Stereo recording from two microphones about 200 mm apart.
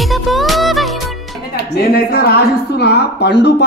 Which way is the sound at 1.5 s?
50° left (ahead or behind).